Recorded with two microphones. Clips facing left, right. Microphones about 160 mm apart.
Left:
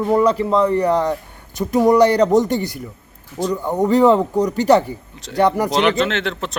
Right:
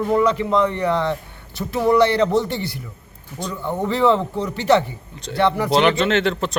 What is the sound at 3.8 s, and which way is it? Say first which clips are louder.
A man's voice: left 5 dB; 40° left (ahead or behind).